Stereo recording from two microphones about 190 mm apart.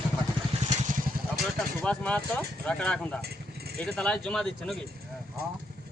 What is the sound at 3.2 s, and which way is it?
Vehicle, 55° right (ahead or behind).